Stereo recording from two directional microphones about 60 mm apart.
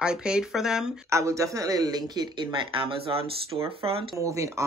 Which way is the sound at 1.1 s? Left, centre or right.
Right.